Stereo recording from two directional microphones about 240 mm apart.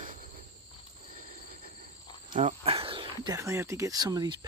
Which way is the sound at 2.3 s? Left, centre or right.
Right.